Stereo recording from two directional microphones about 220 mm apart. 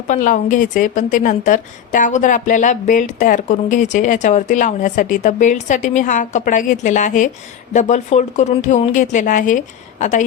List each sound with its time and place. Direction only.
0.1 s a woman's voice: 35° left (ahead or behind)